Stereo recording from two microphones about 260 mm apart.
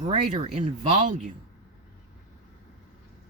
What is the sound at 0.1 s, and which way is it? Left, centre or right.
Speech, right.